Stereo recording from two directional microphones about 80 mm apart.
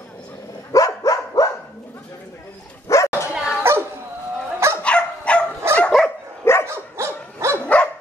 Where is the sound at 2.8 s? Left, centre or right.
Left.